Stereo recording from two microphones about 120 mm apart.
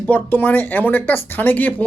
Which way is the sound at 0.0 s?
15° left (ahead or behind).